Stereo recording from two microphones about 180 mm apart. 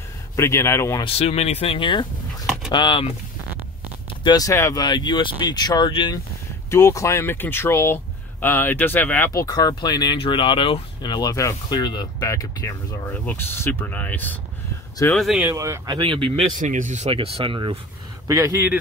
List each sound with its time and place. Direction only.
0.4 s speech: 15° left (ahead or behind)
1.0 s speech: 35° left (ahead or behind)
2.4 s pigeon: centre (ahead or behind)
2.7 s speech: 25° left (ahead or behind)
4.2 s speech: 20° left (ahead or behind)
6.7 s speech: 15° left (ahead or behind)
15.1 s speech: centre (ahead or behind)
15.5 s speech: 20° right (ahead or behind)
16.1 s speech: 30° right (ahead or behind)
16.5 s speech: 45° right (ahead or behind); by 18.7 s 20° right (ahead or behind)